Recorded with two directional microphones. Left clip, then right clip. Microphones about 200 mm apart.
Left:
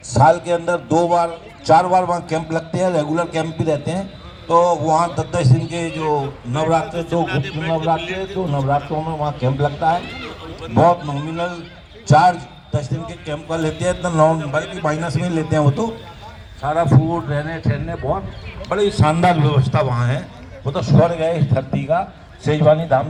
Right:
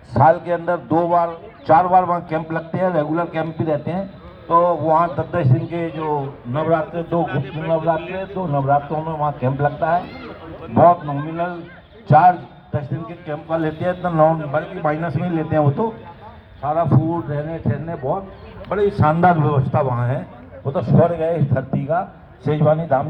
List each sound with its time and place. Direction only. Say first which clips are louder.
0.1 s a man's voice: left 1 dB; 40° left (ahead or behind)
7.3 s a man's voice: left 2 dB; 50° right (ahead or behind)
8.5 s a man's voice: right 3 dB; 30° left (ahead or behind); by 17.2 s 50° left (ahead or behind)
17.2 s a man's voice: left 2 dB; 35° left (ahead or behind)
18.0 s speech: left 1 dB; centre (ahead or behind)
18.7 s a man's voice: even; 20° right (ahead or behind); by 23.0 s 50° right (ahead or behind)